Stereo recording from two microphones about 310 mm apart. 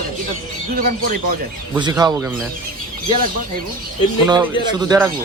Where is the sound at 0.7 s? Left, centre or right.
Right.